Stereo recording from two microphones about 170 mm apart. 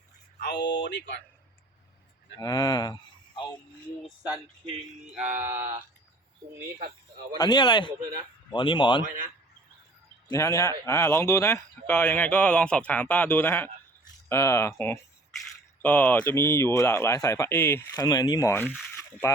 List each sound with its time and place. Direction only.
0.5 s speech: 25° left (ahead or behind)
0.9 s speech: 90° left
2.4 s speech: 20° left (ahead or behind)
5.4 s speech: 15° right (ahead or behind)
7.3 s speech: 25° left (ahead or behind)
10.2 s speech: 20° left (ahead or behind)